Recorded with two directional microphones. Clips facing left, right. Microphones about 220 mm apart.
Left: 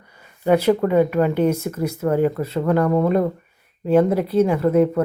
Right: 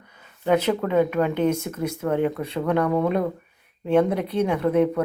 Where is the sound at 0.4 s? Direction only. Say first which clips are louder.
Left 4 dB; 10° left (ahead or behind).